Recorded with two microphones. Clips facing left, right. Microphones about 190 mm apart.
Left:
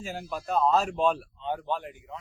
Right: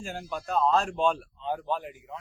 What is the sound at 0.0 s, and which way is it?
Speech, centre (ahead or behind).